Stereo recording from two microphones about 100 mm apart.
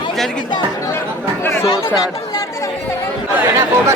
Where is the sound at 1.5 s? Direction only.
35° left (ahead or behind).